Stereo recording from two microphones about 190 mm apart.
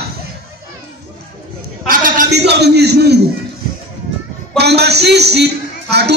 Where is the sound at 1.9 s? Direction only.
45° right (ahead or behind).